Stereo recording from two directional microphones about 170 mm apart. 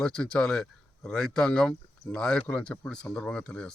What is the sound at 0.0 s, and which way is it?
Speech, 5° left (ahead or behind).